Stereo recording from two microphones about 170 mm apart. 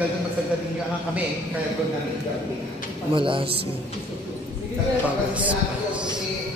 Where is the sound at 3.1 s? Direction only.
30° right (ahead or behind).